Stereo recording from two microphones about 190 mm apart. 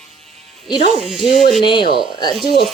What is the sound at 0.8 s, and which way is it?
Speech, 35° right (ahead or behind).